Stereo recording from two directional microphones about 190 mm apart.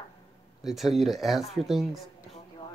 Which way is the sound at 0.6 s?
Centre (ahead or behind).